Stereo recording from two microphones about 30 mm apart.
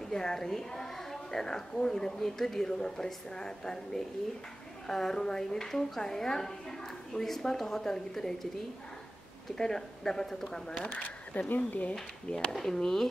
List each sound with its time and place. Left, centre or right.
0.0 s a woman's voice: centre
9.6 s a woman's voice: centre
10.8 s speech: left
11.5 s speech: left
12.4 s a woman's voice: centre